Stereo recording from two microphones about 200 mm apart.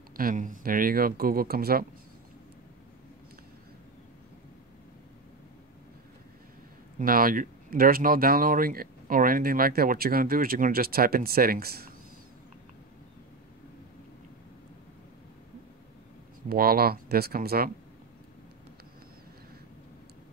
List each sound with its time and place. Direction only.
0.2 s speech: 45° right (ahead or behind)
7.0 s speech: 45° right (ahead or behind)
16.4 s speech: 50° right (ahead or behind)